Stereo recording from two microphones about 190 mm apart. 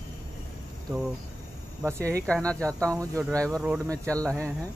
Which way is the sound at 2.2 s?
5° left (ahead or behind).